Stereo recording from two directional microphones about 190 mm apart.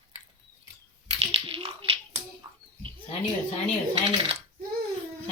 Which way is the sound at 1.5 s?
30° right (ahead or behind).